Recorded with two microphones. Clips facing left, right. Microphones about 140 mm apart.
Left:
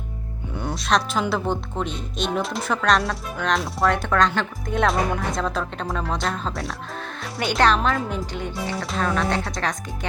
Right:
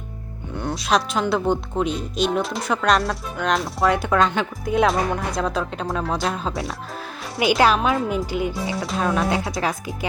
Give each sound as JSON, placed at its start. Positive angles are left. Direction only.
{"t": 0.5, "sound": "a woman's voice", "side_deg": 0}